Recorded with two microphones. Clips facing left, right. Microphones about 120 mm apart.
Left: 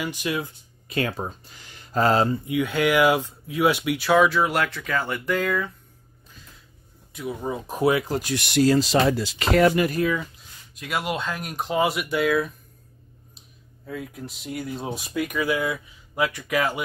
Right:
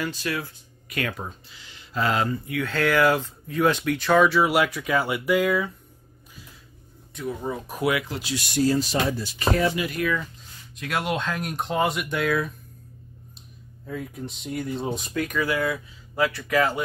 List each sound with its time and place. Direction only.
0.0 s speech: 15° left (ahead or behind)
0.8 s speech: 30° left (ahead or behind)
1.5 s speech: 50° left (ahead or behind)
2.2 s speech: 25° left (ahead or behind); by 5.7 s 10° right (ahead or behind)
7.2 s speech: 10° left (ahead or behind); by 8.5 s 50° left (ahead or behind)
8.5 s speech: 85° left
10.0 s speech: 30° left (ahead or behind)
10.7 s speech: 5° left (ahead or behind)
13.8 s speech: centre (ahead or behind)